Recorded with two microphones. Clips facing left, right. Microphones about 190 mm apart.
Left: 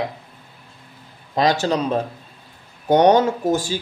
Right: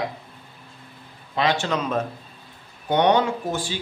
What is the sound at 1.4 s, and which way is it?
Speech, 40° left (ahead or behind).